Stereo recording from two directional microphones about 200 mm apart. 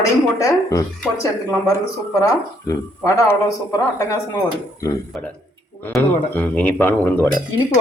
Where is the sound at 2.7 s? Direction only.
15° left (ahead or behind).